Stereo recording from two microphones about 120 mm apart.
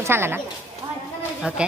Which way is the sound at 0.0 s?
20° right (ahead or behind).